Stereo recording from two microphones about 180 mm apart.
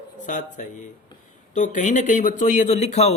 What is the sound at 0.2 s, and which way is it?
A man's voice, 45° left (ahead or behind).